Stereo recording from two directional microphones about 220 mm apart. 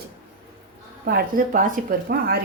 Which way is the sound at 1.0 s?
40° right (ahead or behind).